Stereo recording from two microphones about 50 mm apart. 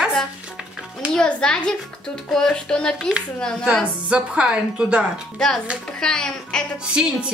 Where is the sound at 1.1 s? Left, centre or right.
Centre.